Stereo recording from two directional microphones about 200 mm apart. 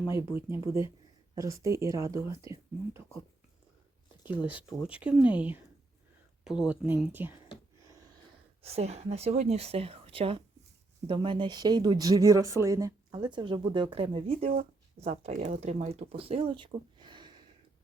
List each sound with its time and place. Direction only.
0.0 s speech: 10° right (ahead or behind)
4.2 s speech: 10° right (ahead or behind)
8.6 s speech: 30° right (ahead or behind)
14.5 s speech: 40° right (ahead or behind); by 17.3 s 25° right (ahead or behind)